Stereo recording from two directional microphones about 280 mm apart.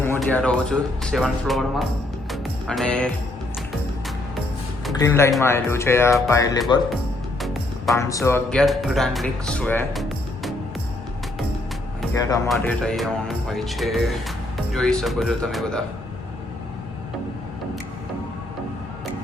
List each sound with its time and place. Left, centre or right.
0.0 s speech: centre
2.3 s music: centre
4.9 s speech: centre
7.4 s music: centre
7.9 s speech: centre
12.5 s speech: centre